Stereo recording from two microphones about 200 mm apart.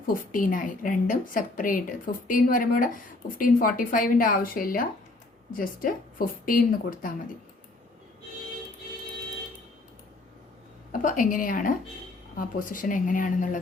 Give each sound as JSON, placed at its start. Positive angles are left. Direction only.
{"t": 0.1, "sound": "a woman's voice", "side_deg": 45}
{"t": 10.9, "sound": "a woman's voice", "side_deg": 40}